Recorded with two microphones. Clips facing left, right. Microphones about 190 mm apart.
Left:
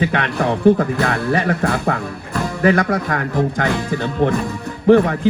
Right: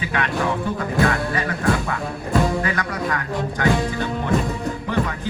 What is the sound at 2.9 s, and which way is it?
Speech, 50° left (ahead or behind).